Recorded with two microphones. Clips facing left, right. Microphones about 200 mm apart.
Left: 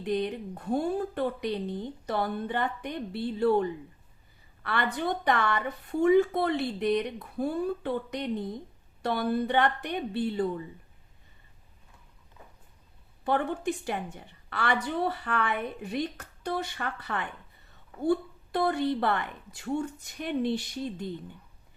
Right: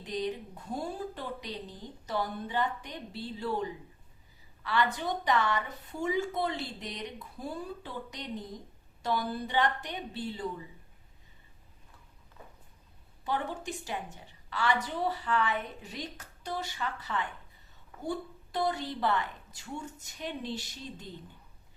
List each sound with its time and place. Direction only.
0.0 s a woman's voice: 60° left (ahead or behind)
13.2 s a woman's voice: 55° left (ahead or behind)